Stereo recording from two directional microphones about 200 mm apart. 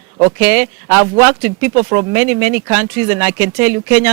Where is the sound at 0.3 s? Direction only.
10° right (ahead or behind).